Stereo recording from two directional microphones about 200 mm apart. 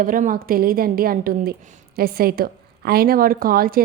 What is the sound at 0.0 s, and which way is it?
A woman's voice, 40° right (ahead or behind).